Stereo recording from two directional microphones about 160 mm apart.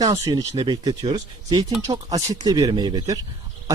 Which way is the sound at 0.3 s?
25° right (ahead or behind).